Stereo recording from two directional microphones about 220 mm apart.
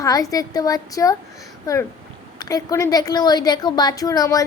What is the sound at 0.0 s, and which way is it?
Speech, 15° left (ahead or behind).